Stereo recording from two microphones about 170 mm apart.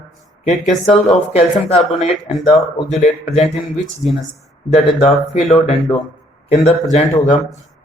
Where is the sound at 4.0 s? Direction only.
Centre (ahead or behind).